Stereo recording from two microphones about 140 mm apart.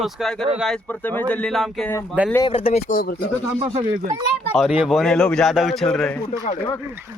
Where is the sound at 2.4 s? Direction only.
40° left (ahead or behind).